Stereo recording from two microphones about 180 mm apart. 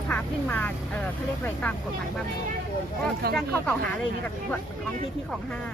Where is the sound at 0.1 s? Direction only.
10° left (ahead or behind).